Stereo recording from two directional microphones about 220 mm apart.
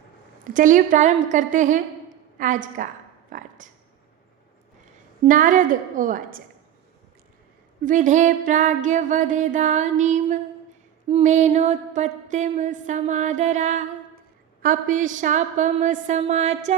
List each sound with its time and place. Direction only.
0.4 s music: 35° right (ahead or behind)
3.3 s a sound: 35° right (ahead or behind)
5.3 s music: 35° right (ahead or behind)
7.9 s music: 35° right (ahead or behind)